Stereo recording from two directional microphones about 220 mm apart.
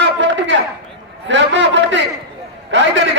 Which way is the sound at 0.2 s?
55° right (ahead or behind).